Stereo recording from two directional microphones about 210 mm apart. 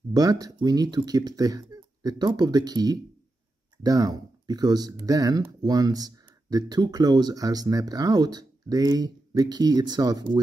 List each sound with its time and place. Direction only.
0.1 s speech: 15° right (ahead or behind)